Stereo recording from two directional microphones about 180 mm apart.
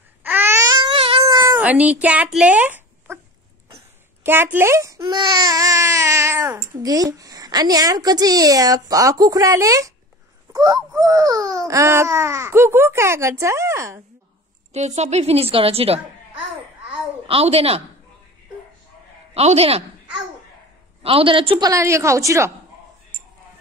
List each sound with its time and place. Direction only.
0.2 s baby cry: 10° right (ahead or behind)
1.6 s speech: 10° right (ahead or behind)
4.2 s speech: 10° right (ahead or behind)
10.5 s wail: 20° right (ahead or behind)
11.0 s speech: 20° right (ahead or behind)
14.7 s a woman's voice: 35° right (ahead or behind)
17.3 s a woman's voice: 35° right (ahead or behind)
19.3 s a woman's voice: 35° right (ahead or behind)
21.0 s speech: 30° right (ahead or behind)